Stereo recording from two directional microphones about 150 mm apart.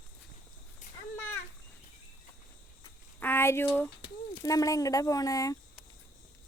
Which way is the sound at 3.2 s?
15° left (ahead or behind).